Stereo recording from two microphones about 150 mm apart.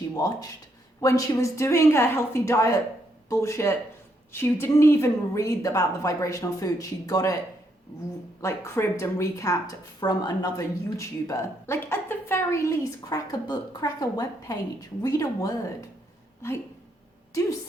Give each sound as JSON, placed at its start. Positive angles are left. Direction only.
{"t": 0.1, "sound": "a woman's voice", "side_deg": 20}
{"t": 8.4, "sound": "a woman's voice", "side_deg": 20}